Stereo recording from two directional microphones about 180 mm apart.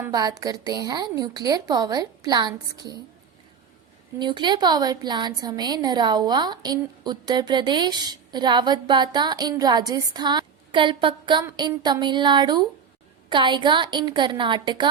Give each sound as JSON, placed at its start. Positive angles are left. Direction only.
{"t": 0.1, "sound": "a woman's voice", "side_deg": -20}
{"t": 4.2, "sound": "a woman's voice", "side_deg": -25}